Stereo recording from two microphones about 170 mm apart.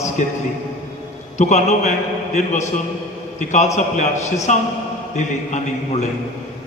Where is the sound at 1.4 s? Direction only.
45° left (ahead or behind).